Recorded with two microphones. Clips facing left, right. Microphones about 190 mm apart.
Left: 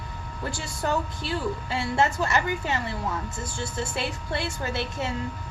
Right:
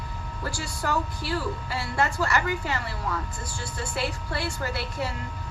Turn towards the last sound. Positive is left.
turn(degrees=20)  # may be behind; listen again after turning